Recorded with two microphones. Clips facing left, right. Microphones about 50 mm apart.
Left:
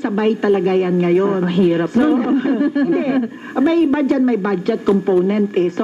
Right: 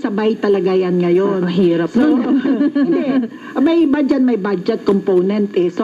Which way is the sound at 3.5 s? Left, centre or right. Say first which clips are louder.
Right 2 dB; left.